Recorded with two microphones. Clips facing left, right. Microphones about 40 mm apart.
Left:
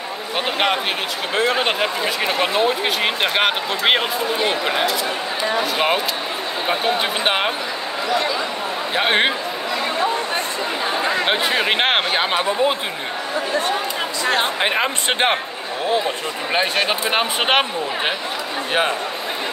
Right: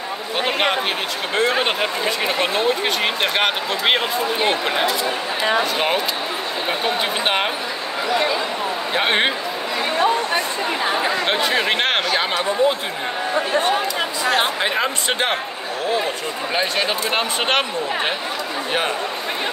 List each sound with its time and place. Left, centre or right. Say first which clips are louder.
1.3 s speech: even; centre
8.9 s speech: left 1 dB; centre
11.1 s speech: left 1 dB; centre
14.6 s speech: left 1 dB; left
16.5 s speech: left 2 dB; centre
18.7 s speech: left 3 dB; centre